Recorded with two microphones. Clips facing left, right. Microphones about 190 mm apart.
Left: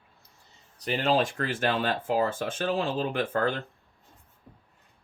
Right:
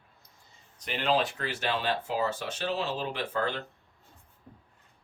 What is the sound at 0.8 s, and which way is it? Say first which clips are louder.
Speech: left 3 dB; 40° left (ahead or behind).